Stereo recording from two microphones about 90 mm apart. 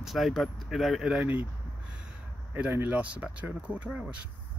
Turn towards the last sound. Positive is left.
turn(degrees=-10)  # may be behind; listen again after turning